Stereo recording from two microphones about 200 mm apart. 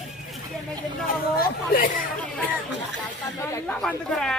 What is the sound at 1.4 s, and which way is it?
Chatter, 50° left (ahead or behind).